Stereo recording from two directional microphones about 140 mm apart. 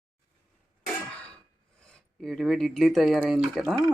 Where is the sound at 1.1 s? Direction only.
10° left (ahead or behind).